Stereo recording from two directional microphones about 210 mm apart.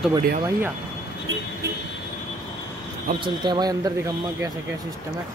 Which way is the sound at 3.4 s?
20° right (ahead or behind).